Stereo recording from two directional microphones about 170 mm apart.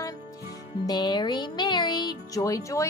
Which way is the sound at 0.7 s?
25° left (ahead or behind).